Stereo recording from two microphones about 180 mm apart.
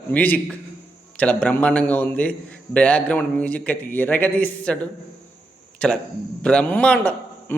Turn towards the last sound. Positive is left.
turn(degrees=5)  # may be behind; listen again after turning